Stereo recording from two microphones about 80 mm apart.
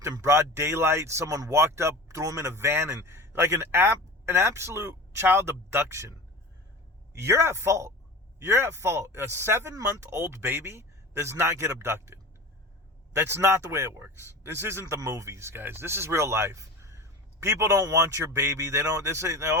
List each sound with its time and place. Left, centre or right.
0.1 s speech: right